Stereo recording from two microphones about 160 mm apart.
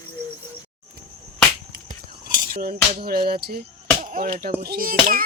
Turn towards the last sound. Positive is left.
turn(degrees=-60)  # may be behind; listen again after turning